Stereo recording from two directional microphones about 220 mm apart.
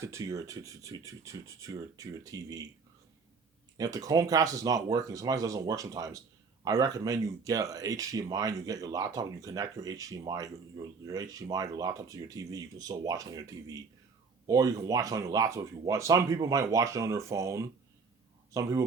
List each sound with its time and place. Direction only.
0.0 s speech: 15° right (ahead or behind)
3.8 s speech: 15° right (ahead or behind)